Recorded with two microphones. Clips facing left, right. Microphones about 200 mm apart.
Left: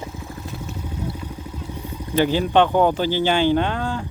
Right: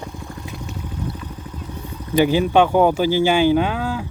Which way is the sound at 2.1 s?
10° right (ahead or behind).